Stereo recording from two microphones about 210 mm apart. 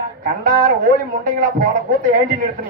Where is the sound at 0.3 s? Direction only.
40° right (ahead or behind).